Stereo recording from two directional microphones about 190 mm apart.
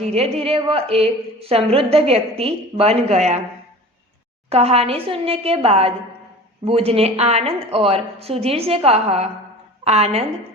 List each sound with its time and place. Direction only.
0.0 s a woman's voice: 35° right (ahead or behind)
4.4 s a woman's voice: 30° right (ahead or behind)